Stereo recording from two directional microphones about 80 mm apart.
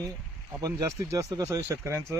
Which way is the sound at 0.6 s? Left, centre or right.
Right.